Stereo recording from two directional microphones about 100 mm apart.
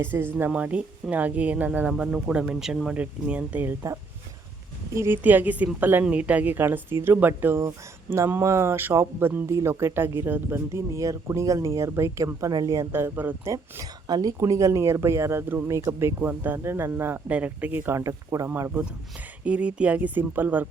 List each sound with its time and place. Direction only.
0.0 s speech: 20° right (ahead or behind)
4.9 s speech: 20° right (ahead or behind)
12.9 s speech: 25° right (ahead or behind)
13.5 s speech: 35° right (ahead or behind)
19.5 s speech: 10° right (ahead or behind)